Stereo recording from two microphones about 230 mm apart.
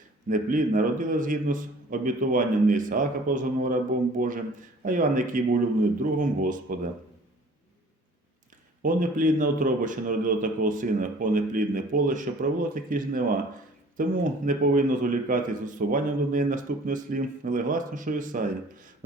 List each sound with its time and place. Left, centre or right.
0.3 s a man's voice: right
8.8 s a man's voice: right